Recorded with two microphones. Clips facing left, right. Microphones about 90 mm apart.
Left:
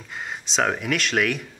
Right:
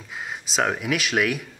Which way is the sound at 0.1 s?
Centre (ahead or behind).